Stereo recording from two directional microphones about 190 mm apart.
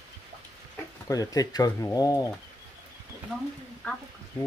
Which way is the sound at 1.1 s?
20° left (ahead or behind).